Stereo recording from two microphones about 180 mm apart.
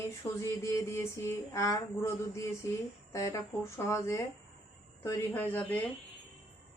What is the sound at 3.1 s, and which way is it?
Speech, 15° left (ahead or behind).